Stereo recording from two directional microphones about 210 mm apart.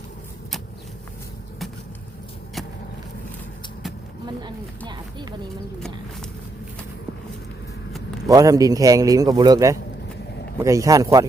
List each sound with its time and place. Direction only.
8.3 s a man's voice: 15° right (ahead or behind)